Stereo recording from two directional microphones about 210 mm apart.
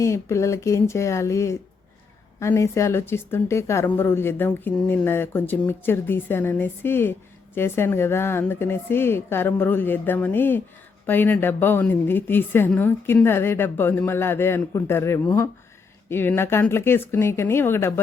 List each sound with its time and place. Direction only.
0.0 s speech: 15° left (ahead or behind)